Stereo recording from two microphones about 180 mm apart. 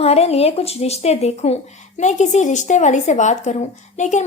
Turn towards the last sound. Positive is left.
turn(degrees=40)  # may be behind; listen again after turning